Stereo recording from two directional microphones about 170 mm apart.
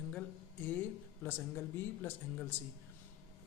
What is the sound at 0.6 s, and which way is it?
Speech, 10° left (ahead or behind).